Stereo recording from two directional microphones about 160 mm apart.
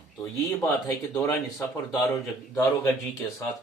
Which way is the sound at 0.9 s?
15° left (ahead or behind).